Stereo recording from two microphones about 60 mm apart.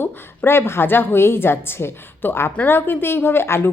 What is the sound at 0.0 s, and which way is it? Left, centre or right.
Speech, left.